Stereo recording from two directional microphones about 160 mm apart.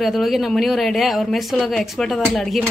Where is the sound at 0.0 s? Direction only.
Centre (ahead or behind).